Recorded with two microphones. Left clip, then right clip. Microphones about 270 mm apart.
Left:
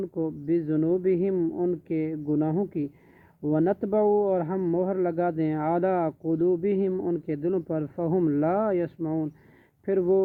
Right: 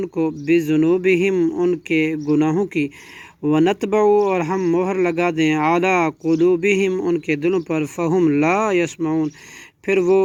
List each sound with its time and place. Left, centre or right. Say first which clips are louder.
0.0 s a man's voice: right 8 dB; right